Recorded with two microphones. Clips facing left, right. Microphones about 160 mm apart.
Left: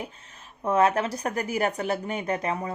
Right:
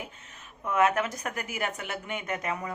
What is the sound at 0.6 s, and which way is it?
Speech, 35° left (ahead or behind).